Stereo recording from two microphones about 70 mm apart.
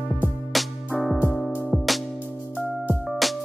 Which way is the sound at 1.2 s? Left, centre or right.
Left.